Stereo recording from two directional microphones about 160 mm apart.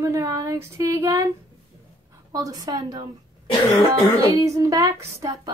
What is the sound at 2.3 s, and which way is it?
Speech, 25° right (ahead or behind).